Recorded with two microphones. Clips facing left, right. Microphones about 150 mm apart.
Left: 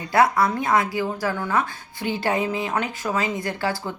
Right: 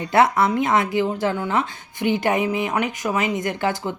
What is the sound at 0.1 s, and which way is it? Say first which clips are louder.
Speech: right 1 dB; 25° right (ahead or behind).